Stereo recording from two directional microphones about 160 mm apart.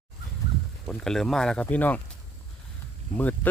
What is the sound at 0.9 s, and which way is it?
Speech, 5° left (ahead or behind).